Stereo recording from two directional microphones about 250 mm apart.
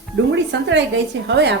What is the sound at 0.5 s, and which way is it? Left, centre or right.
Speech, right.